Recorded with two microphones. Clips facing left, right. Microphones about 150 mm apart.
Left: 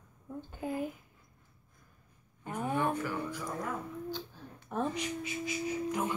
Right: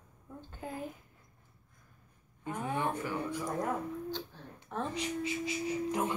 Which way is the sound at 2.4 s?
15° left (ahead or behind).